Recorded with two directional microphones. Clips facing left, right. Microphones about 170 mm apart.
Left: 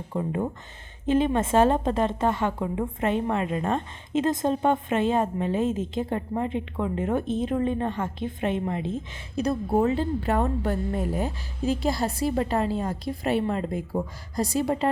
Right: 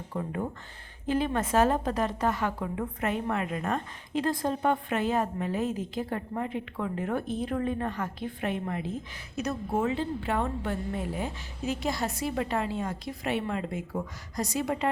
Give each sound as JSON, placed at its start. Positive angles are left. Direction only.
{"t": 0.1, "sound": "a woman's voice", "side_deg": 25}